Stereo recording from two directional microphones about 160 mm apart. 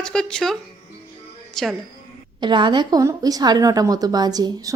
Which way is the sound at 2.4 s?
30° right (ahead or behind).